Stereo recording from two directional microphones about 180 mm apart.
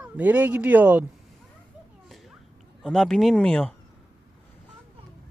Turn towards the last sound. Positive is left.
turn(degrees=5)  # may be behind; listen again after turning